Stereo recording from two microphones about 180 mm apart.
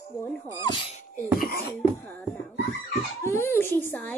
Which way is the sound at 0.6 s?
25° left (ahead or behind).